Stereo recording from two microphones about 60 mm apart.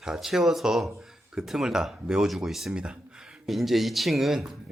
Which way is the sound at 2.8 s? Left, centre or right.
Centre.